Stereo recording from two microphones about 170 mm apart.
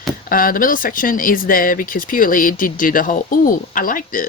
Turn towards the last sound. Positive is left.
turn(degrees=55)  # may be behind; listen again after turning